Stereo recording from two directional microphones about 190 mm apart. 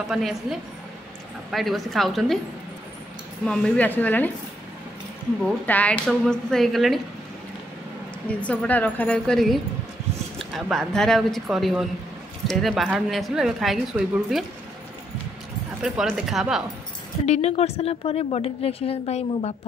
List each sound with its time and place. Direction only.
0.1 s a woman's voice: centre (ahead or behind)
3.4 s a woman's voice: 5° left (ahead or behind)
5.7 s a woman's voice: 5° left (ahead or behind)
8.4 s a woman's voice: 5° left (ahead or behind)
15.8 s a woman's voice: 5° right (ahead or behind)
17.3 s a woman's voice: 35° left (ahead or behind)